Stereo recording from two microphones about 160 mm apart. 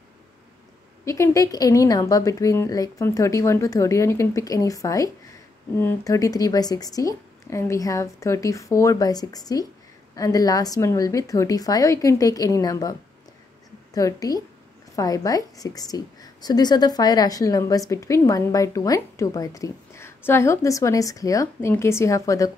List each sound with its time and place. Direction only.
1.0 s a woman's voice: 20° left (ahead or behind)
13.9 s a woman's voice: 20° left (ahead or behind)